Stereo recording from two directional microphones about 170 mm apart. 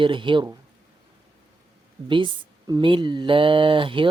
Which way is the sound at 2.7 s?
30° right (ahead or behind).